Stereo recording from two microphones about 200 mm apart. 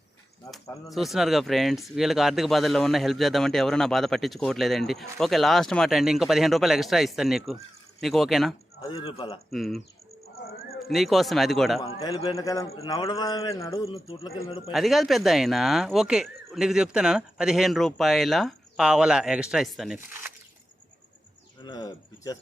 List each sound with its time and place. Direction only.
0.5 s speech: centre (ahead or behind)
8.8 s speech: 20° left (ahead or behind)
9.5 s speech: centre (ahead or behind)
11.9 s speech: 20° left (ahead or behind)
13.8 s speech: 30° left (ahead or behind)
14.7 s speech: centre (ahead or behind)
21.6 s speech: 20° left (ahead or behind)